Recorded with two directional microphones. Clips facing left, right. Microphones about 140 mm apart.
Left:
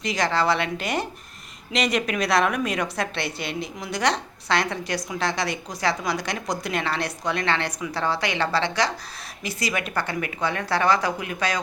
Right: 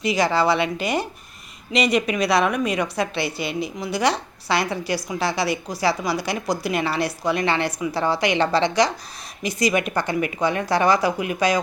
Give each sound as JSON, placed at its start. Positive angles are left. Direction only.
{"t": 0.0, "sound": "a woman's voice", "side_deg": -5}